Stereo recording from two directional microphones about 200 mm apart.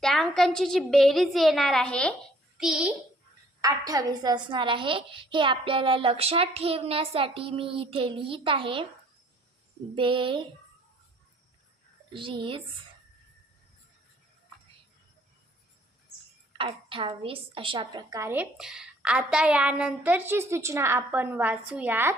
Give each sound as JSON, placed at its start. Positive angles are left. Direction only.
{"t": 0.0, "sound": "a woman's voice", "side_deg": 0}
{"t": 3.6, "sound": "a woman's voice", "side_deg": -20}
{"t": 9.9, "sound": "a woman's voice", "side_deg": -25}
{"t": 12.1, "sound": "a woman's voice", "side_deg": -25}
{"t": 16.5, "sound": "a woman's voice", "side_deg": -25}